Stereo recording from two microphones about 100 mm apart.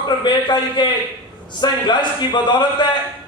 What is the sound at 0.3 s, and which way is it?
Speech, 45° left (ahead or behind).